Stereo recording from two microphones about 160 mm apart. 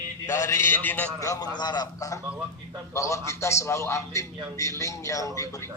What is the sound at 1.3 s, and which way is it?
A man's voice, 25° left (ahead or behind).